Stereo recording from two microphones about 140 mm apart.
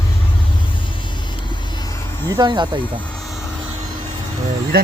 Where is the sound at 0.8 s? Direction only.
35° left (ahead or behind).